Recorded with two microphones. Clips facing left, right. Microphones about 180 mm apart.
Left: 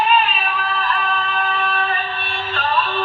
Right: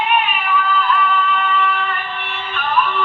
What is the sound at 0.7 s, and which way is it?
Music, 65° left (ahead or behind).